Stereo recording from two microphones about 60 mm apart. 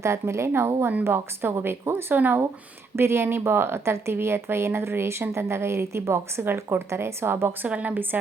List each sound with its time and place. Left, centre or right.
0.0 s a woman's voice: right
2.9 s speech: right
7.7 s a woman's voice: right